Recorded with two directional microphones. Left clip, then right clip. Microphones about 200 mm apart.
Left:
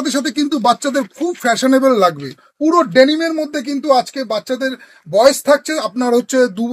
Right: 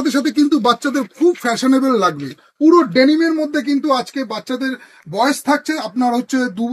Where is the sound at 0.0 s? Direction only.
55° left (ahead or behind).